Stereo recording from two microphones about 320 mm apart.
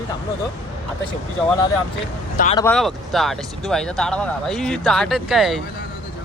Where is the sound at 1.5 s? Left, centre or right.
Centre.